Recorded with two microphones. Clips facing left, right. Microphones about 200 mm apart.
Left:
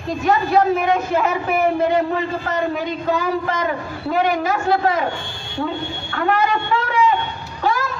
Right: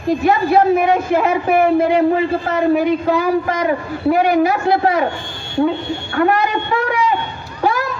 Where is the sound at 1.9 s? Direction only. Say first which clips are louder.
Right 5 dB; 10° right (ahead or behind).